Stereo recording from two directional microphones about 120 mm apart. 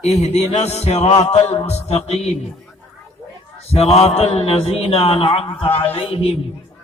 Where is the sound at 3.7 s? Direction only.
60° left (ahead or behind).